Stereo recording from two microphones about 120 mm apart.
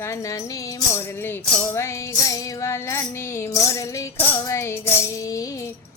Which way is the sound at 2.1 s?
30° left (ahead or behind).